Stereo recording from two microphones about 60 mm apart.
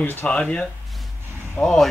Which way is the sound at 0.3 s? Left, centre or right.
Left.